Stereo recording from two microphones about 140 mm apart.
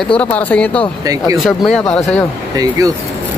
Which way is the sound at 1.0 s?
25° right (ahead or behind).